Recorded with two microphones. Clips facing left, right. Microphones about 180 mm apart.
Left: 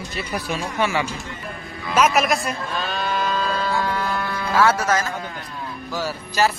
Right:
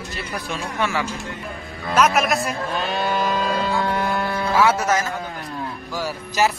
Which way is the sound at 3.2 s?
20° right (ahead or behind).